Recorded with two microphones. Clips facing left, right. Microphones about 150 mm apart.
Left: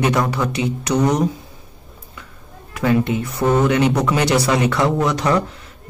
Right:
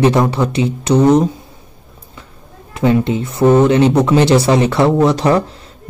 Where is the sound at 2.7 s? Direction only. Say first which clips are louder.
Right 4 dB; 25° right (ahead or behind).